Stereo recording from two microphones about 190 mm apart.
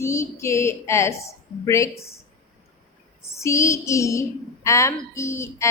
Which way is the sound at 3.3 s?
15° left (ahead or behind).